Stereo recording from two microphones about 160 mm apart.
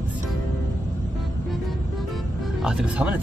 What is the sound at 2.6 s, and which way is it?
Speech, 5° right (ahead or behind).